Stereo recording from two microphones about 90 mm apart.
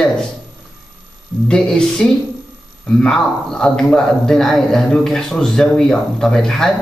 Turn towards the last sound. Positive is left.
turn(degrees=5)  # may be behind; listen again after turning